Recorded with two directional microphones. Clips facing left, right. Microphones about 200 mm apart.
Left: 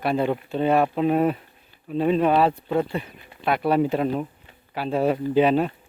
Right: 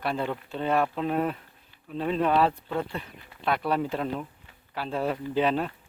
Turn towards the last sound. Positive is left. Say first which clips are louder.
# left 7 dB
turn(degrees=15)  # may be behind; listen again after turning